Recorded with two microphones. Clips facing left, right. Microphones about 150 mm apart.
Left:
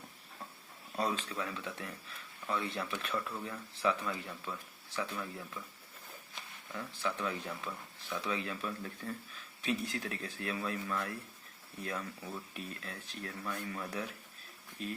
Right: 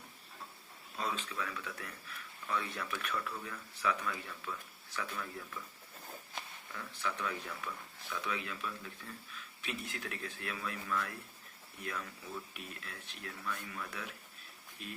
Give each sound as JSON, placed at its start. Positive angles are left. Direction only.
{"t": 0.9, "sound": "speech", "side_deg": 35}
{"t": 6.7, "sound": "speech", "side_deg": 30}